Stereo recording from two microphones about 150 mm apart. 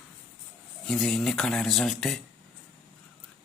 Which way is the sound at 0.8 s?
Centre (ahead or behind).